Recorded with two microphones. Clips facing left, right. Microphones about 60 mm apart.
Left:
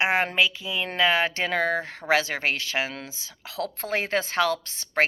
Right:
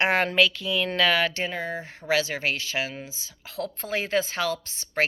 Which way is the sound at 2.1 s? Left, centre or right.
Left.